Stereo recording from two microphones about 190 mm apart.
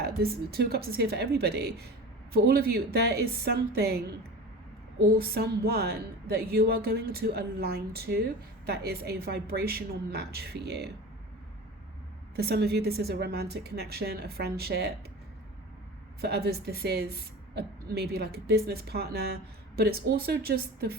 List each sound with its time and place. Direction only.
0.0 s speech: 55° right (ahead or behind)
12.4 s speech: 60° right (ahead or behind)
16.2 s speech: 55° right (ahead or behind)